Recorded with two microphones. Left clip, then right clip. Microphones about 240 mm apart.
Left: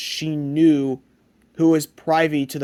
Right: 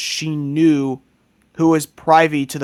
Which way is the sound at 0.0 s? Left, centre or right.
Right.